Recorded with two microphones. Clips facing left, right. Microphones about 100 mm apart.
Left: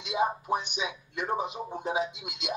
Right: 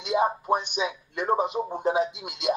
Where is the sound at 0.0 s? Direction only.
55° right (ahead or behind).